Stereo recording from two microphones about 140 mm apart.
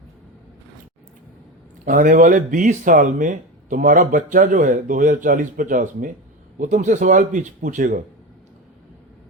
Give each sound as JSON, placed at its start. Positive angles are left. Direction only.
{"t": 1.8, "sound": "speech", "side_deg": -70}